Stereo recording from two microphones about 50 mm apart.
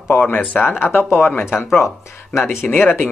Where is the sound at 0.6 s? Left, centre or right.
Left.